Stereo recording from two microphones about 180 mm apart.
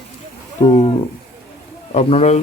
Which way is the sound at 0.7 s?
35° left (ahead or behind).